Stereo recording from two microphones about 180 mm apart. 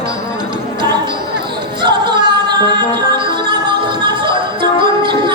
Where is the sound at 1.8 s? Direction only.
25° right (ahead or behind).